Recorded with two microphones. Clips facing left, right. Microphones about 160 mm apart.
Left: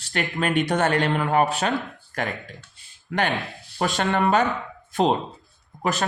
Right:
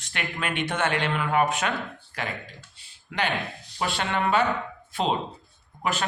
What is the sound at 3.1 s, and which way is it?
Speech, 45° left (ahead or behind).